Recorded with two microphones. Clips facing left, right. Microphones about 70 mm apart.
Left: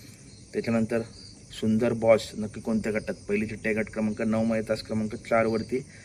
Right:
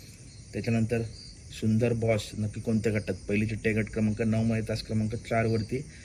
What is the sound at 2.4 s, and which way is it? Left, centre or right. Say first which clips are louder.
Speech: even; left.